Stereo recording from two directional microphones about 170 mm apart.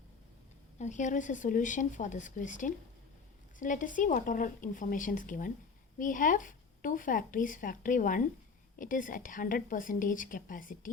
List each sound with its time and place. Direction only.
0.8 s speech: 45° left (ahead or behind)